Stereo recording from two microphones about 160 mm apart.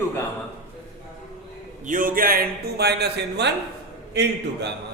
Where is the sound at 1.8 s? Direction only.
55° right (ahead or behind).